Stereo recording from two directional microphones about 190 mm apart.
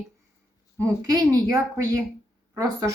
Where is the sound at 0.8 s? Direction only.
15° right (ahead or behind).